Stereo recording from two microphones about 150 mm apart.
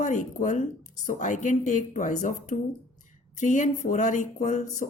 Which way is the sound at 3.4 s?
55° left (ahead or behind).